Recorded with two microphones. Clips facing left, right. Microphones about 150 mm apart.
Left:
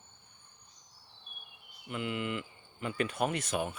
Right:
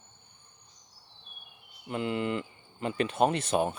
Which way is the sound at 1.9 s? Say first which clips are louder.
Right 5 dB; 35° right (ahead or behind).